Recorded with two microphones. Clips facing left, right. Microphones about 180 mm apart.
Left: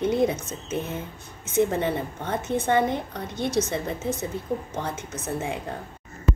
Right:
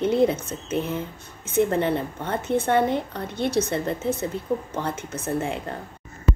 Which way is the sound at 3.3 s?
60° right (ahead or behind).